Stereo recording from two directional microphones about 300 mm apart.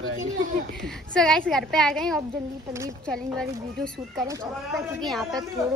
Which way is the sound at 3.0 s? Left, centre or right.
Centre.